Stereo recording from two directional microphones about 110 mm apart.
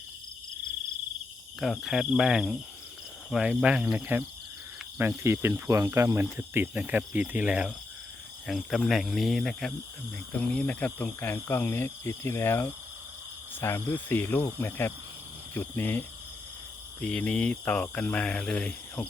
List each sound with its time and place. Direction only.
1.6 s speech: centre (ahead or behind)
8.4 s speech: centre (ahead or behind)